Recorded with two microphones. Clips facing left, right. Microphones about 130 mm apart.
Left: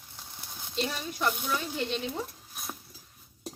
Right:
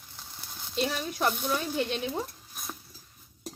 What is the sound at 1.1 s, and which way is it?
Speech, 45° right (ahead or behind).